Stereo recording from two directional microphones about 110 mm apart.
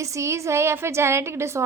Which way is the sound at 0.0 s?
25° right (ahead or behind).